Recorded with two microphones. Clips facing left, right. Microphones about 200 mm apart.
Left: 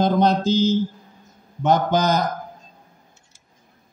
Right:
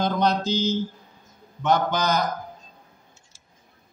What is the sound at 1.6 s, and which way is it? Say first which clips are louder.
Speech: left 4 dB; 45° left (ahead or behind).